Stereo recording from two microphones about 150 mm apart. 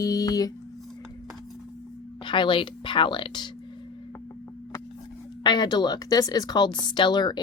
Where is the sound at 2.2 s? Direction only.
30° left (ahead or behind).